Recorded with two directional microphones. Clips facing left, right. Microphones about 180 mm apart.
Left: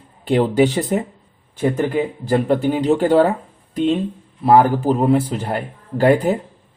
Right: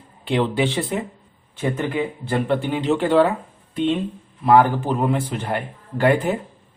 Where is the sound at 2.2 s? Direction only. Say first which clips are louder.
Left 6 dB; 40° left (ahead or behind).